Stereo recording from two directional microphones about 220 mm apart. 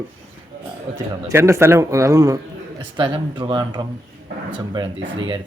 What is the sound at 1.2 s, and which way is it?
A man's voice, 10° right (ahead or behind).